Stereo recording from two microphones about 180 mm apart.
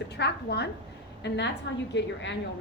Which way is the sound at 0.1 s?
65° left (ahead or behind).